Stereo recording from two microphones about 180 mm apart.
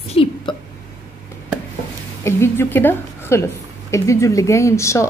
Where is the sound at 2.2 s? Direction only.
15° left (ahead or behind).